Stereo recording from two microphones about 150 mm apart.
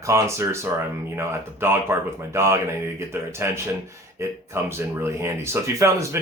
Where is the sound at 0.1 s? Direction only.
20° right (ahead or behind).